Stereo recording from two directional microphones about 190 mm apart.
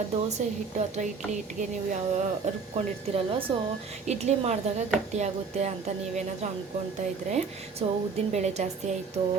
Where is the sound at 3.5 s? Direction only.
25° right (ahead or behind).